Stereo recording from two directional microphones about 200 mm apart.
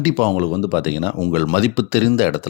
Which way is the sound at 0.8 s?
35° left (ahead or behind).